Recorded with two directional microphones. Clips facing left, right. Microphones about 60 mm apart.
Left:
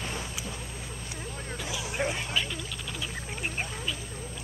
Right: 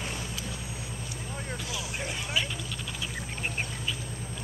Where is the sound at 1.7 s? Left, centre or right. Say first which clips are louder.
Left 9 dB; left.